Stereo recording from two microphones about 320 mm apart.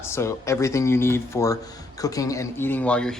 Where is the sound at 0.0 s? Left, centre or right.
Centre.